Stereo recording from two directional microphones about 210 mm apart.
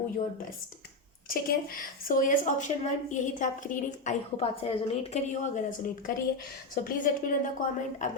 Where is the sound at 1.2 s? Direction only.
45° left (ahead or behind).